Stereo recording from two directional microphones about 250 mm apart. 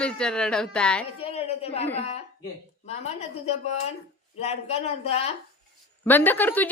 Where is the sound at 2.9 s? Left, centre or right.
Left.